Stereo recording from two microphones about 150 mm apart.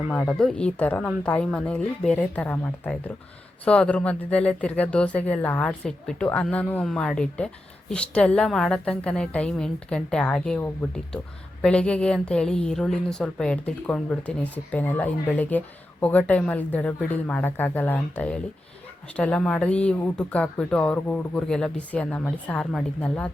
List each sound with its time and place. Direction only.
0.1 s speech: 5° left (ahead or behind)